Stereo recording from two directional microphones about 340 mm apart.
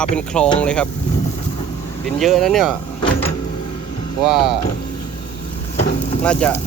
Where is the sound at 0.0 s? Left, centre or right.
Centre.